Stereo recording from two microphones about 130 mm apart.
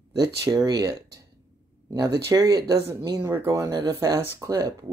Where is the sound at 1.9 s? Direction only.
30° right (ahead or behind).